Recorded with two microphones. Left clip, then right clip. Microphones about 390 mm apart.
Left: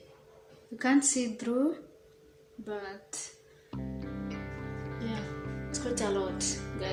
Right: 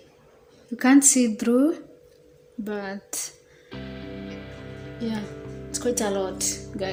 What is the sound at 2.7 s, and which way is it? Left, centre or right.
Speech, left.